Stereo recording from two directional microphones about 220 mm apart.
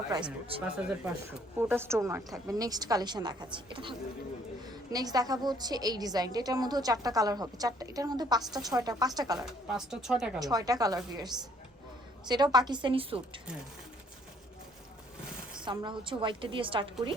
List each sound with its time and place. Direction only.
0.6 s a woman's voice: 5° right (ahead or behind)
9.6 s speech: centre (ahead or behind)
10.4 s a woman's voice: 15° right (ahead or behind)
15.6 s a woman's voice: 20° right (ahead or behind)